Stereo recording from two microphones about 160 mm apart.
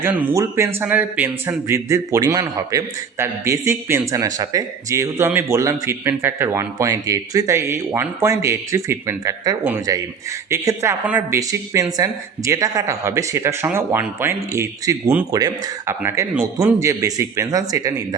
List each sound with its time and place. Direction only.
0.0 s a man's voice: 10° right (ahead or behind)